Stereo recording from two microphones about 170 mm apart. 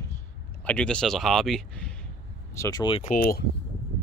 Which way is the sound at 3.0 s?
55° left (ahead or behind).